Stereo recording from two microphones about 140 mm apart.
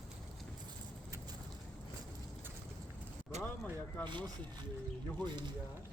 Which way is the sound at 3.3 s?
55° right (ahead or behind).